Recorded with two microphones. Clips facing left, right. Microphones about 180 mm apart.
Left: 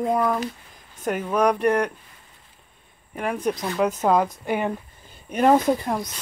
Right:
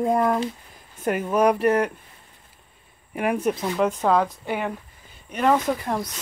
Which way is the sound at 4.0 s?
10° left (ahead or behind).